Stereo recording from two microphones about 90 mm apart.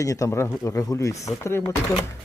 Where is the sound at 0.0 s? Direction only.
40° left (ahead or behind).